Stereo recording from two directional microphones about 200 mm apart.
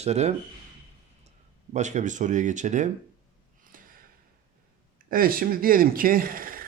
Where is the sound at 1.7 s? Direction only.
35° right (ahead or behind).